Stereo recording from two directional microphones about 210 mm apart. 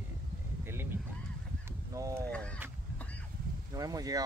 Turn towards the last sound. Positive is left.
turn(degrees=-15)  # may be behind; listen again after turning